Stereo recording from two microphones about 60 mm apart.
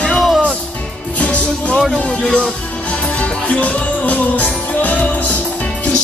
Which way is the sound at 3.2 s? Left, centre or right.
Left.